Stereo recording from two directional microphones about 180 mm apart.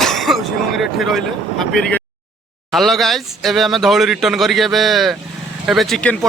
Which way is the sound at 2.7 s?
Centre (ahead or behind).